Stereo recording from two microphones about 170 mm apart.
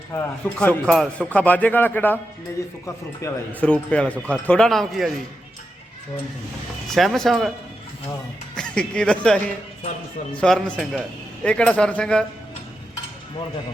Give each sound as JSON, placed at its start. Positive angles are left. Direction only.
{"t": 0.1, "sound": "speech", "side_deg": 10}
{"t": 3.7, "sound": "speech", "side_deg": 5}
{"t": 6.8, "sound": "speech", "side_deg": 0}
{"t": 8.5, "sound": "speech", "side_deg": 5}